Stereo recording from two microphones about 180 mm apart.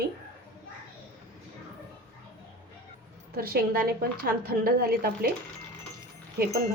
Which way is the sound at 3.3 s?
55° right (ahead or behind).